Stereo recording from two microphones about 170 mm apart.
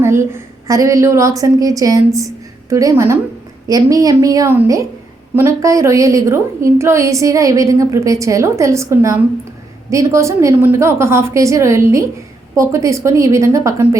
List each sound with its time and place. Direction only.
0.0 s a woman's voice: 15° right (ahead or behind)